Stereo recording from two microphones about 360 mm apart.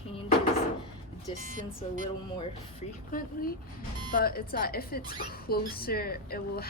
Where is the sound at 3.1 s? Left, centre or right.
Left.